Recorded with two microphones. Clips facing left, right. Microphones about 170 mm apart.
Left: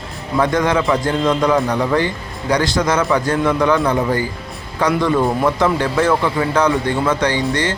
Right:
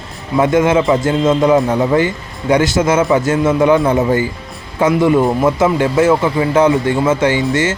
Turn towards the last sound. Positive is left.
turn(degrees=-20)  # may be behind; listen again after turning